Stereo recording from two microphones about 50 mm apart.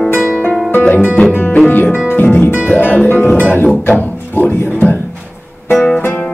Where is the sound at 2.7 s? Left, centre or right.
Left.